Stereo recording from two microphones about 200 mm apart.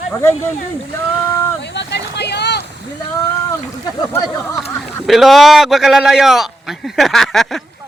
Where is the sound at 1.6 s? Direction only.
60° left (ahead or behind).